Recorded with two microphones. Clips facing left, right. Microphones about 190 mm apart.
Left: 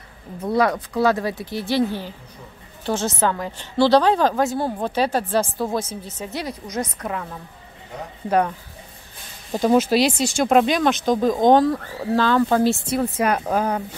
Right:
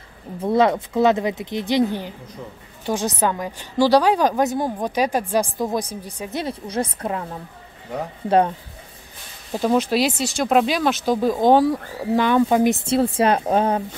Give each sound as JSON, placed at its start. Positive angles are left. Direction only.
{"t": 0.4, "sound": "speech", "side_deg": -25}
{"t": 6.4, "sound": "speech", "side_deg": -30}
{"t": 8.3, "sound": "speech", "side_deg": -25}
{"t": 9.5, "sound": "speech", "side_deg": 0}